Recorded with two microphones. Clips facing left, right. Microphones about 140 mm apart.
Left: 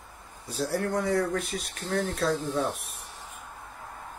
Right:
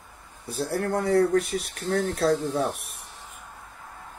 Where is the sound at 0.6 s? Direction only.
55° right (ahead or behind).